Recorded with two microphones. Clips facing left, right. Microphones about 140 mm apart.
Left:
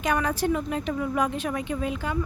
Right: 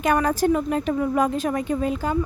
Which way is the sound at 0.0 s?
45° right (ahead or behind).